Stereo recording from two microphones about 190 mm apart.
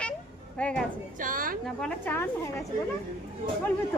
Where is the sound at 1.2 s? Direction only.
45° right (ahead or behind).